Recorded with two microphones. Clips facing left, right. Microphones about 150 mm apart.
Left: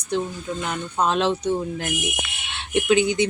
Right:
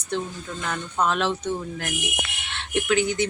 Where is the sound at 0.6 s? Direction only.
15° left (ahead or behind).